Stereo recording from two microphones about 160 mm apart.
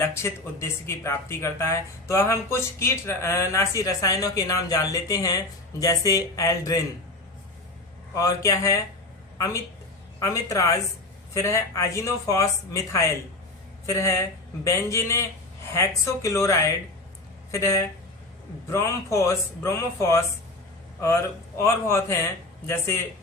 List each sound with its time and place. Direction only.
0.0 s speech: 15° left (ahead or behind)
8.1 s speech: 20° left (ahead or behind)
10.2 s speech: 20° left (ahead or behind)
21.6 s speech: 15° left (ahead or behind)